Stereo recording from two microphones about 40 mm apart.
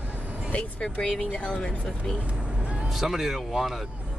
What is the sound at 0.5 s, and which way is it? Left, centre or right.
Speech, left.